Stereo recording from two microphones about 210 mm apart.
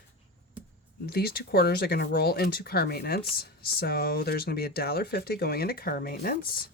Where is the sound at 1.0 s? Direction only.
45° left (ahead or behind).